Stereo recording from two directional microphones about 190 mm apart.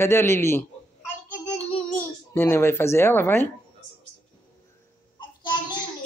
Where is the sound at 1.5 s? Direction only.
10° left (ahead or behind).